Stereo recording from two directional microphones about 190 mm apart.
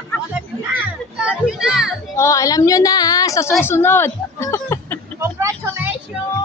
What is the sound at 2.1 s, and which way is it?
A woman's voice, 15° left (ahead or behind).